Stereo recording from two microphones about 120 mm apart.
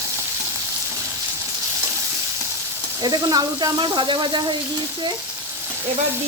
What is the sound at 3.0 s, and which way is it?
Speech, 30° right (ahead or behind).